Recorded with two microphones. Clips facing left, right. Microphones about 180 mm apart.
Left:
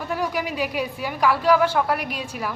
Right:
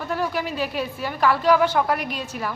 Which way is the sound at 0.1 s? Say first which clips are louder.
Even; 10° left (ahead or behind).